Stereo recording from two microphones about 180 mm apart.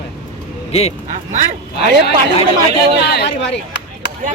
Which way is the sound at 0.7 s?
35° left (ahead or behind).